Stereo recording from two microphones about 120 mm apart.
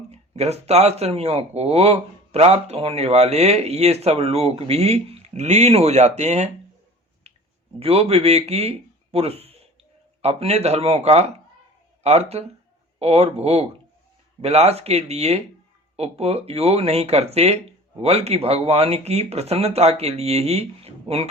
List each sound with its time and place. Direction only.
0.1 s speech: 60° right (ahead or behind)
7.3 s a sound: 60° right (ahead or behind)
7.8 s speech: 55° right (ahead or behind)